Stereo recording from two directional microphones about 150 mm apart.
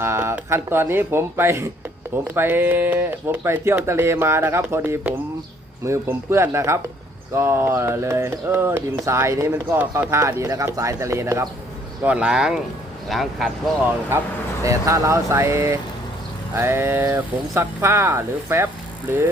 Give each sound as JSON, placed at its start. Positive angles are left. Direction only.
{"t": 0.0, "sound": "speech", "side_deg": -15}
{"t": 12.0, "sound": "speech", "side_deg": -10}
{"t": 14.6, "sound": "speech", "side_deg": -20}